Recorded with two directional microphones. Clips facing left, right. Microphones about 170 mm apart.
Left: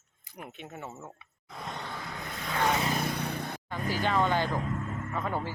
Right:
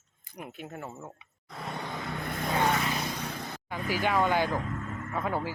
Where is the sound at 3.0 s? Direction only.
60° left (ahead or behind).